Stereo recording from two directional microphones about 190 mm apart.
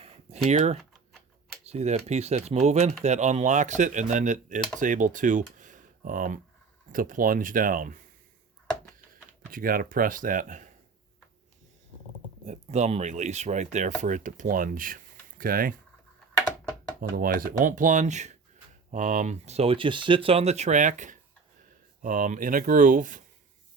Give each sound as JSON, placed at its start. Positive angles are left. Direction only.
{"t": 0.5, "sound": "speech", "side_deg": -35}
{"t": 9.5, "sound": "speech", "side_deg": -50}
{"t": 12.5, "sound": "speech", "side_deg": -35}
{"t": 17.0, "sound": "speech", "side_deg": -50}